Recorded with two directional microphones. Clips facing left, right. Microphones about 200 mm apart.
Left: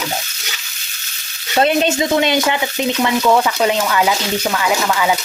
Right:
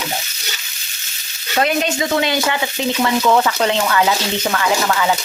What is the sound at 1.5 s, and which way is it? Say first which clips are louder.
Frying: left 3 dB; 25° left (ahead or behind).